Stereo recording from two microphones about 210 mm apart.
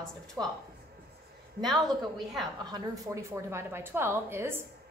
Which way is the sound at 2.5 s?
15° right (ahead or behind).